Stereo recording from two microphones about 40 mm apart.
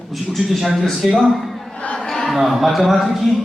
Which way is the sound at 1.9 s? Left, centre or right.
Centre.